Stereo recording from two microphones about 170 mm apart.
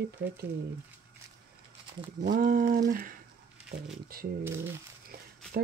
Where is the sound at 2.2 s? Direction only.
60° right (ahead or behind).